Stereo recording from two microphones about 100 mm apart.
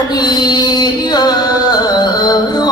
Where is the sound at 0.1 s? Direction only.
45° left (ahead or behind).